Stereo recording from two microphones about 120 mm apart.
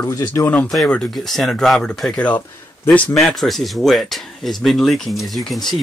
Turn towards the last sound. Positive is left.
turn(degrees=0)  # may be behind; listen again after turning